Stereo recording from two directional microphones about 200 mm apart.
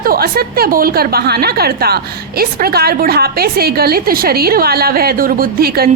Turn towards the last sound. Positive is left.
turn(degrees=-50)  # may be behind; listen again after turning